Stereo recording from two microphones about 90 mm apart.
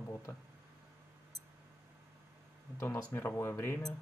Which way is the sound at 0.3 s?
35° left (ahead or behind).